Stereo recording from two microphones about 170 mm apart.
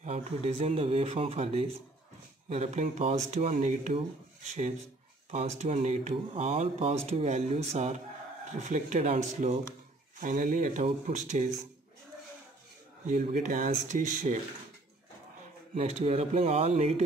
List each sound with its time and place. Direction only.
0.0 s speech: 40° right (ahead or behind)
10.2 s speech: 50° right (ahead or behind)
13.0 s speech: 45° right (ahead or behind)
15.7 s speech: 40° right (ahead or behind)